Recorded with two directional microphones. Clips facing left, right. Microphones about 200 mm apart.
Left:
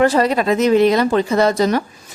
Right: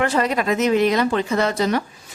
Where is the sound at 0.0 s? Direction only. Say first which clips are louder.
Left 5 dB; 35° left (ahead or behind).